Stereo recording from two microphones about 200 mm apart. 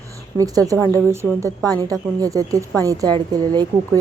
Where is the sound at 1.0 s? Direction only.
15° right (ahead or behind).